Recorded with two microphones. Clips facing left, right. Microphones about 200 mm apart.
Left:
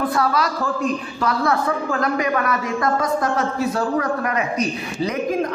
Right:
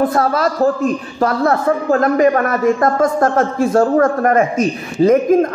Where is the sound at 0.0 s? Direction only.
45° right (ahead or behind).